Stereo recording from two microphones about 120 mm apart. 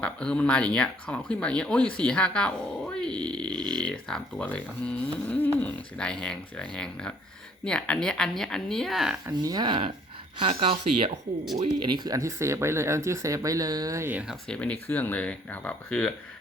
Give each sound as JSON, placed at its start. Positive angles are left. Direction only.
{"t": 0.0, "sound": "speech", "side_deg": 10}
{"t": 9.2, "sound": "speech", "side_deg": -30}
{"t": 10.5, "sound": "speech", "side_deg": -55}
{"t": 11.8, "sound": "speech", "side_deg": -40}
{"t": 14.3, "sound": "speech", "side_deg": 5}